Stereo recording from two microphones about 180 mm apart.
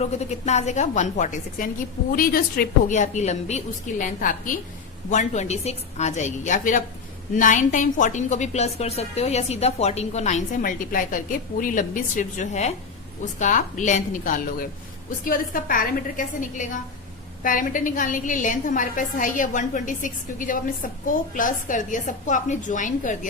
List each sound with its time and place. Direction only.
0.0 s a woman's voice: 40° left (ahead or behind)